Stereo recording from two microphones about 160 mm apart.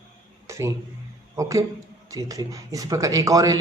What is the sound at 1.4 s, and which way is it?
Speech, 20° right (ahead or behind).